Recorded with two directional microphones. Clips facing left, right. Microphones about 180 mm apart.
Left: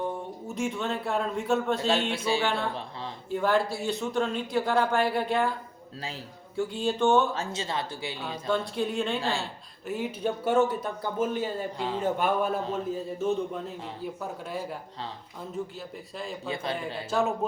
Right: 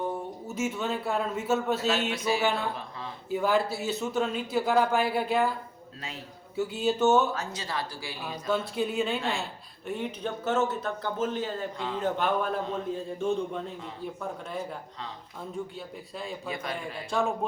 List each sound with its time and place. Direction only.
0.4 s a man's voice: 5° right (ahead or behind)
2.1 s speech: 30° left (ahead or behind)
2.4 s a man's voice: 5° right (ahead or behind)
6.6 s a man's voice: 5° right (ahead or behind)
7.3 s speech: 25° left (ahead or behind)
8.2 s a man's voice: 5° right (ahead or behind)
15.6 s a man's voice: centre (ahead or behind)
16.5 s speech: 30° left (ahead or behind)
17.1 s a man's voice: centre (ahead or behind)